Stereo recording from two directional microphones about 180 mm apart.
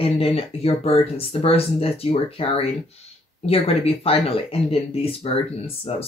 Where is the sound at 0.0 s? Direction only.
30° left (ahead or behind).